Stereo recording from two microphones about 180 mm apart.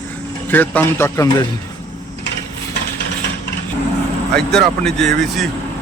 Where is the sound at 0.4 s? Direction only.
10° left (ahead or behind).